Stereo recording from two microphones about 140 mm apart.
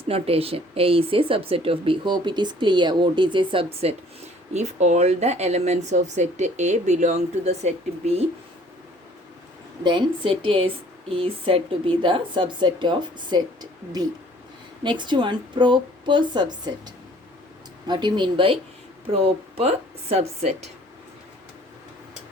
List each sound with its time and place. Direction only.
0.0 s a woman's voice: 45° right (ahead or behind)
4.5 s speech: 55° right (ahead or behind)
9.8 s a woman's voice: 35° right (ahead or behind)